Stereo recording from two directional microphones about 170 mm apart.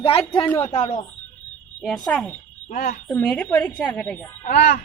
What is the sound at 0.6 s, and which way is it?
Speech, 45° left (ahead or behind).